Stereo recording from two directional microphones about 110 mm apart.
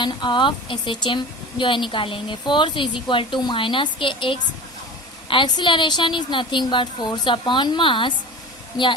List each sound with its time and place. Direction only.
0.0 s a woman's voice: 45° left (ahead or behind)
8.7 s a woman's voice: 35° left (ahead or behind)